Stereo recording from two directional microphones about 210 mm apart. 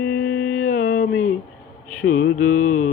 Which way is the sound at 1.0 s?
65° left (ahead or behind).